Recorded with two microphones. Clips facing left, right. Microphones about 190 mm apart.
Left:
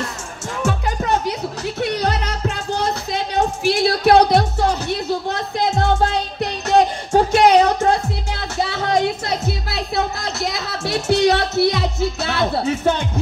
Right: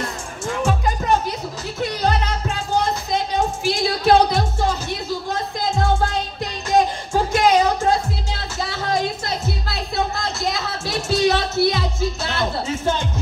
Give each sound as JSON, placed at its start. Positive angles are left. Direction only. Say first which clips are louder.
{"t": 0.6, "sound": "music", "louder": "left 1 dB", "side_deg": 70}
{"t": 8.8, "sound": "music", "louder": "left 3 dB", "side_deg": 65}
{"t": 10.2, "sound": "a sound", "louder": "even", "side_deg": 65}
{"t": 11.6, "sound": "speech", "louder": "left 2 dB", "side_deg": 65}